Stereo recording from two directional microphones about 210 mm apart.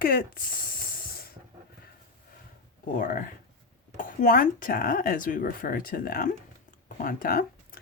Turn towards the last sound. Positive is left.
turn(degrees=45)  # may be behind; listen again after turning